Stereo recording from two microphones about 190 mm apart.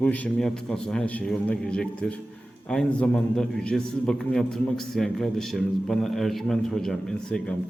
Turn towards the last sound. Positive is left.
turn(degrees=5)  # may be behind; listen again after turning